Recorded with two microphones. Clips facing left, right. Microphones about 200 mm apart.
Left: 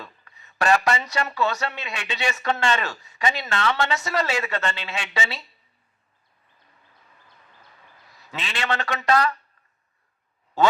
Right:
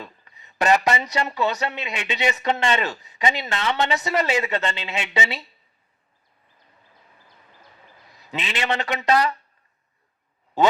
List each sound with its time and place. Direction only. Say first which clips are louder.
0.0 s speech: right 3 dB; 20° right (ahead or behind)
8.3 s speech: right 2 dB; 20° right (ahead or behind)
10.6 s speech: right 1 dB; 20° right (ahead or behind)